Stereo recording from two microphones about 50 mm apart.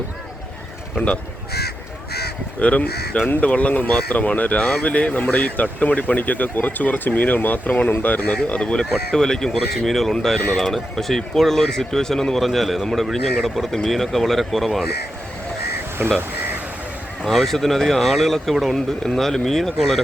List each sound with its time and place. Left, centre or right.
0.9 s speech: left
2.6 s speech: left; by 14.8 s centre
16.0 s speech: right
17.2 s speech: centre